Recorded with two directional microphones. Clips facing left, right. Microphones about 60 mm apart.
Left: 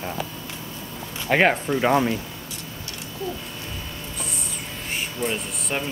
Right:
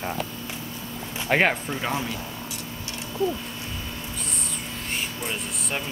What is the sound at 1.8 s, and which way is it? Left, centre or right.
Speech, left.